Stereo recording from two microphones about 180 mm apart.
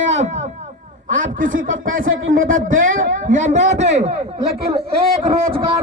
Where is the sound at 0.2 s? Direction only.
40° right (ahead or behind).